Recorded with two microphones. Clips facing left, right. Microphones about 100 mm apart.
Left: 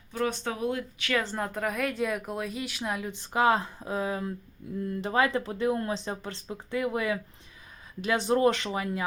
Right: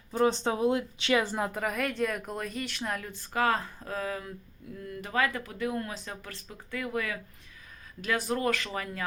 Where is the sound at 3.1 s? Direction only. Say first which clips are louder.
Left 4 dB; 20° left (ahead or behind).